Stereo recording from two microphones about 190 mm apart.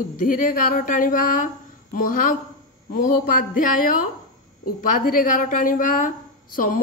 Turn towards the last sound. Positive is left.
turn(degrees=45)  # may be behind; listen again after turning